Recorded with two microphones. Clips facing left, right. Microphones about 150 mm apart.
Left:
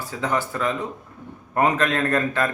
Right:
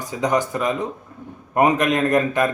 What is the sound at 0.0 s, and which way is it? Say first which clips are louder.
Speech: right 4 dB; 15° right (ahead or behind).